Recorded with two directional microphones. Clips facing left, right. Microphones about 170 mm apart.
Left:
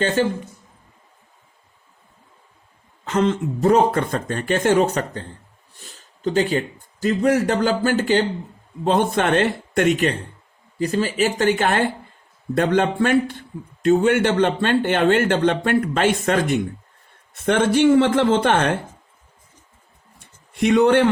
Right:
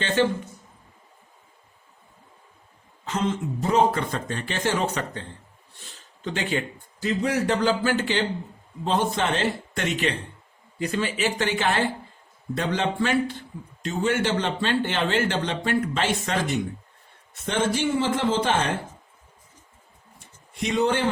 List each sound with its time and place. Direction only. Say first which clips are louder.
3.0 s speech: left 6 dB; 65° left (ahead or behind); by 5.2 s 40° left (ahead or behind)
6.2 s speech: left 7 dB; 35° left (ahead or behind)
7.1 s speech: left 5 dB; 50° left (ahead or behind)
10.8 s speech: left 6 dB; 35° left (ahead or behind); by 18.7 s 60° left (ahead or behind)
20.1 s a sound: left 8 dB; 60° left (ahead or behind)